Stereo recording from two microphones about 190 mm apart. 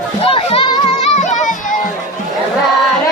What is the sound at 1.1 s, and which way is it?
Music, 40° left (ahead or behind).